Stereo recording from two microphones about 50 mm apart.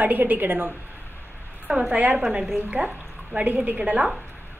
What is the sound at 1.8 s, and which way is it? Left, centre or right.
A woman's voice, right.